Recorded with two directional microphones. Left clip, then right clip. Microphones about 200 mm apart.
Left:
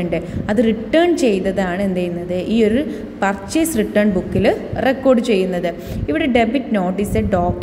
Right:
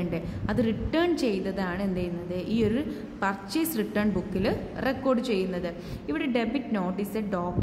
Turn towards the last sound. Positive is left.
turn(degrees=10)  # may be behind; listen again after turning